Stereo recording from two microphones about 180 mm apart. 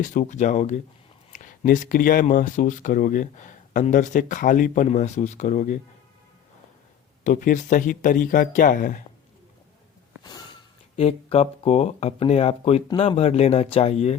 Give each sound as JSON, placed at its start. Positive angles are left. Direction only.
{"t": 0.0, "sound": "speech", "side_deg": 45}
{"t": 7.3, "sound": "speech", "side_deg": 45}
{"t": 10.2, "sound": "speech", "side_deg": 25}